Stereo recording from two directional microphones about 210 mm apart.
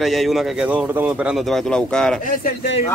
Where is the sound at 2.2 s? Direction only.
40° left (ahead or behind).